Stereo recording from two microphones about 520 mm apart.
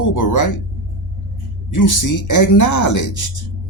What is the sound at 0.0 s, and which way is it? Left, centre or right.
Speech, left.